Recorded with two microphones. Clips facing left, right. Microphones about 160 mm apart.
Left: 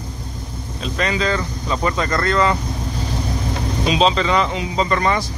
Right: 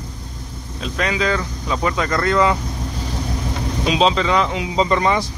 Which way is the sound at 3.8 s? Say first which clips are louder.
Even; 5° right (ahead or behind).